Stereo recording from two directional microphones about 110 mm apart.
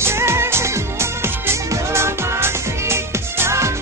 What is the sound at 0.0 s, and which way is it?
Music, 25° right (ahead or behind).